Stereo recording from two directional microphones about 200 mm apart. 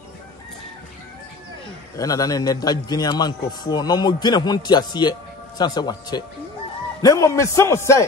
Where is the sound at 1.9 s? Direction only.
15° left (ahead or behind).